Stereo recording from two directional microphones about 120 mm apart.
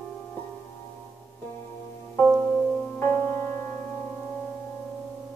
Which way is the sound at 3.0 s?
20° left (ahead or behind).